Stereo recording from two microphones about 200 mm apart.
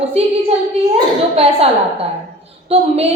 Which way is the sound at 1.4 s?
30° right (ahead or behind).